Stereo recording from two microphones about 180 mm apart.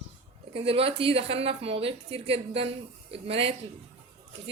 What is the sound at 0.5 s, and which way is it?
A woman's voice, 30° right (ahead or behind).